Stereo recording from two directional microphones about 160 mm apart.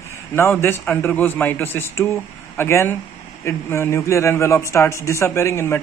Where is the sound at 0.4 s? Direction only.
15° left (ahead or behind).